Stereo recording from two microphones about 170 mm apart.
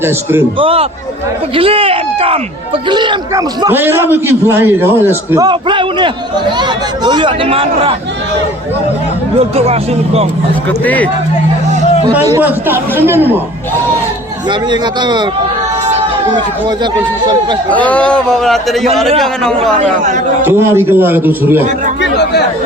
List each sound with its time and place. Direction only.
0.0 s a man's voice: 15° right (ahead or behind)
0.6 s speech: 35° right (ahead or behind)
3.7 s a man's voice: 10° right (ahead or behind); by 7.9 s 35° right (ahead or behind)
10.7 s speech: 10° left (ahead or behind)
12.3 s a man's voice: 10° right (ahead or behind)
14.5 s speech: 25° right (ahead or behind)
16.3 s speech: 25° right (ahead or behind)
17.7 s a man's voice: 10° left (ahead or behind)
19.8 s speech: 45° right (ahead or behind)
20.4 s a man's voice: 15° right (ahead or behind)
22.2 s speech: 70° left (ahead or behind)